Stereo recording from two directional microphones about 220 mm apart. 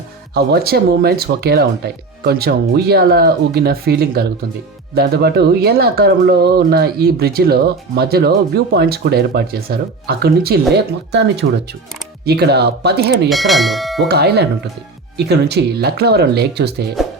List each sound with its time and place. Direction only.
0.3 s speech: 45° right (ahead or behind)
13.2 s speech: centre (ahead or behind)
14.1 s speech: 45° right (ahead or behind)